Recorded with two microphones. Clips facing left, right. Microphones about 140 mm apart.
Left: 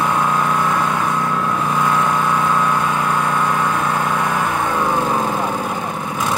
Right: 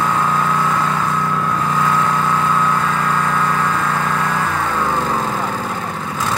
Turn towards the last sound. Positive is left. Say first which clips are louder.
# left 1 dB
turn(degrees=15)  # may be behind; listen again after turning